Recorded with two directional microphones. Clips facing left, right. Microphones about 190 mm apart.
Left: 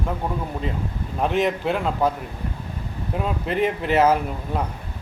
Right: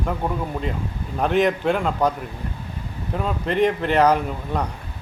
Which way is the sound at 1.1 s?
Centre (ahead or behind).